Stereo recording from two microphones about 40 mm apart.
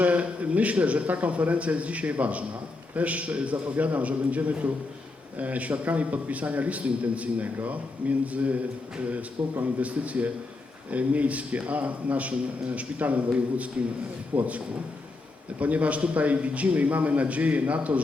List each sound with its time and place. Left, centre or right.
0.0 s a man's voice: right
9.0 s a man's voice: right